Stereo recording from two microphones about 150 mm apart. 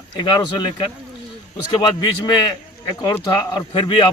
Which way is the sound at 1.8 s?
25° left (ahead or behind).